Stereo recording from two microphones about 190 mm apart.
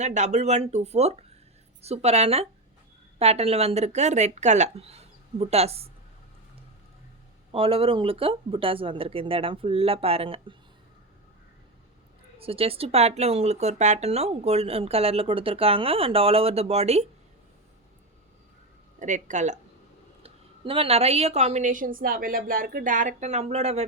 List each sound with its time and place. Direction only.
0.0 s speech: 40° right (ahead or behind)
7.5 s speech: 30° right (ahead or behind)
12.4 s speech: 30° right (ahead or behind)
18.9 s speech: 40° right (ahead or behind)